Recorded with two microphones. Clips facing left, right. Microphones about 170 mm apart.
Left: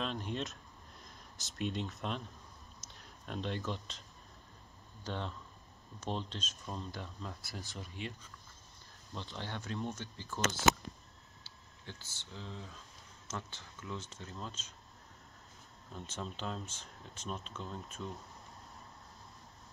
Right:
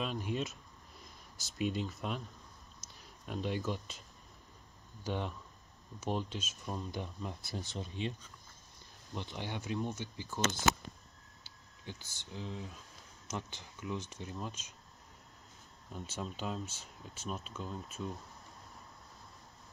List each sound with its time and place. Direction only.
0.0 s speech: 5° right (ahead or behind)
5.0 s speech: 15° right (ahead or behind)
9.1 s speech: 15° right (ahead or behind)
11.4 s speech: 15° right (ahead or behind)
15.9 s speech: 5° right (ahead or behind)